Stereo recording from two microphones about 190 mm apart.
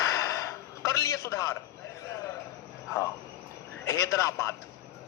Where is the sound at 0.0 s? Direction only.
15° left (ahead or behind).